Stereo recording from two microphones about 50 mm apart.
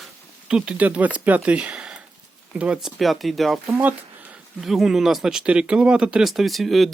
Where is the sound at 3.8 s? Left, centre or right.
Right.